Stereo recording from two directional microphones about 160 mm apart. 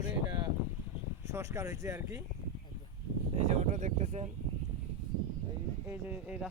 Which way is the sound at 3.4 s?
50° right (ahead or behind).